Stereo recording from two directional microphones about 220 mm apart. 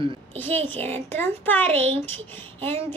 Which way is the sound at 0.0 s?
20° right (ahead or behind).